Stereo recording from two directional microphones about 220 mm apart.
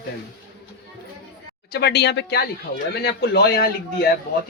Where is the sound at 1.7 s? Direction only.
45° left (ahead or behind).